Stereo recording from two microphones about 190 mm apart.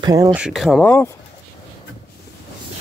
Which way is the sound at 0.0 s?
15° right (ahead or behind).